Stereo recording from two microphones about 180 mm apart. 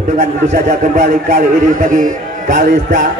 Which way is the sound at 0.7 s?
45° right (ahead or behind).